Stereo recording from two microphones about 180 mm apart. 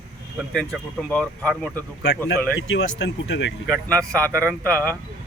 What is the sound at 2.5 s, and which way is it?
Speech, 90° left.